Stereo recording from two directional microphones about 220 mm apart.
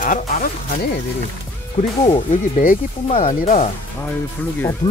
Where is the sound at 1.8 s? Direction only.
35° left (ahead or behind).